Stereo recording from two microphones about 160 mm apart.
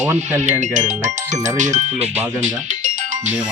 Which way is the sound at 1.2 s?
20° right (ahead or behind).